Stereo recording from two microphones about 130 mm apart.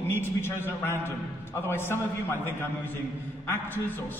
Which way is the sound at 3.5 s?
15° left (ahead or behind).